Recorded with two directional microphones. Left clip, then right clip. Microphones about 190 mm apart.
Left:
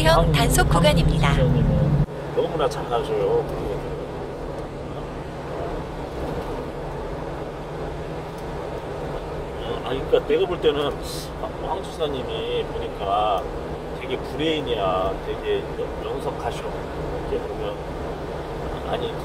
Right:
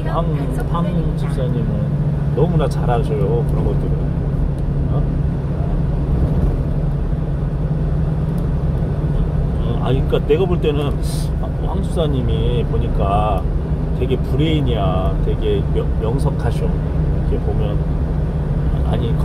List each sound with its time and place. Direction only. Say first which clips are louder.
10.1 s speech: right 2 dB; 30° right (ahead or behind)